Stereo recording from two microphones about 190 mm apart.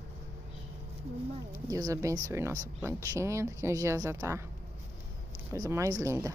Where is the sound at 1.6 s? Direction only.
20° right (ahead or behind).